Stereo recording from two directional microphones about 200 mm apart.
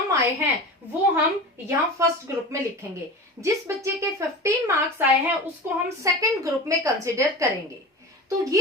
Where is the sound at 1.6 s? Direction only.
15° right (ahead or behind).